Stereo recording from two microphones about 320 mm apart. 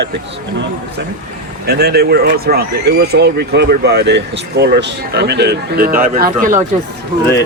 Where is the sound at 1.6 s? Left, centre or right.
Right.